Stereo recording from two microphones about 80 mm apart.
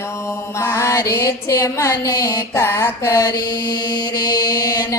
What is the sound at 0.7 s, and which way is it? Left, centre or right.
Mantra, left.